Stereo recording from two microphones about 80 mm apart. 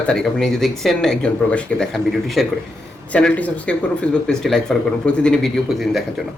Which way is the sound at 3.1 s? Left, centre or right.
Centre.